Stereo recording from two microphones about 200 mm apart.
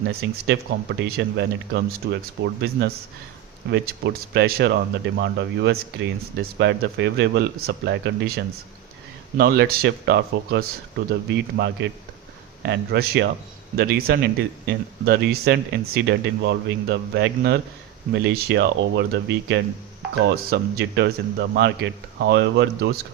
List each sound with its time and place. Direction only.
0.0 s speech: 55° right (ahead or behind)